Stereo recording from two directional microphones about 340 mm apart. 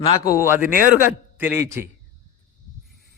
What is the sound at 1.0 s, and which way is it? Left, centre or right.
Speech, centre.